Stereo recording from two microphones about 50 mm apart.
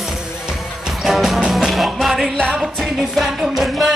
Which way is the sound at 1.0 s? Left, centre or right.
Centre.